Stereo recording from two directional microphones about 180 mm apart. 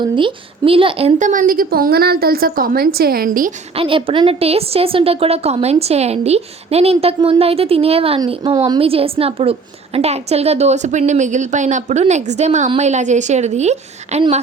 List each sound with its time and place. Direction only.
0.2 s a woman's voice: 30° right (ahead or behind); by 3.5 s 50° right (ahead or behind)
3.8 s a woman's voice: 30° right (ahead or behind)